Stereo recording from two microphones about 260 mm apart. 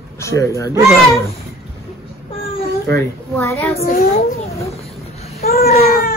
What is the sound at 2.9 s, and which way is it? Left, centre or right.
Speech, centre.